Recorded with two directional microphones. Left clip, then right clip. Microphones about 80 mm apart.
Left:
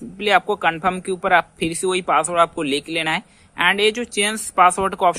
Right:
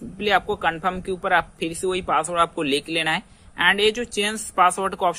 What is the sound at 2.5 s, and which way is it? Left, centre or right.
Speech, left.